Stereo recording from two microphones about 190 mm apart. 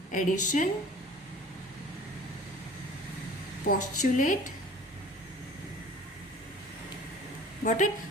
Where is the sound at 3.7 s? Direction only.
45° left (ahead or behind).